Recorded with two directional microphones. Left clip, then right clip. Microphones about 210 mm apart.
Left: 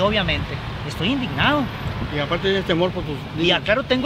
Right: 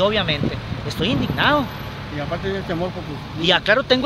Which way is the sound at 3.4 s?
20° right (ahead or behind).